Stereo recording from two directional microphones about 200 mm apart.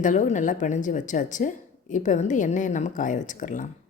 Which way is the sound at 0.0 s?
40° left (ahead or behind).